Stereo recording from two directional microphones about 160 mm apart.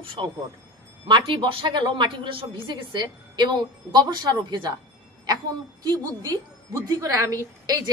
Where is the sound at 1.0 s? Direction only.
30° right (ahead or behind).